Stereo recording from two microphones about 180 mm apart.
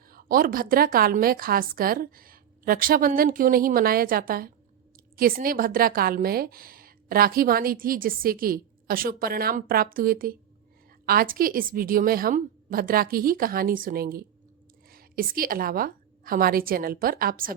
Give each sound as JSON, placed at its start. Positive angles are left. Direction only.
{"t": 0.1, "sound": "a woman's voice", "side_deg": -50}